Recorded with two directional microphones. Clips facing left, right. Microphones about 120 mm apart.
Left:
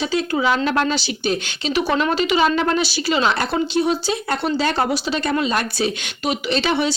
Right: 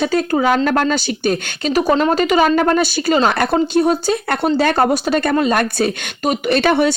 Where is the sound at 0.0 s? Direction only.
45° right (ahead or behind).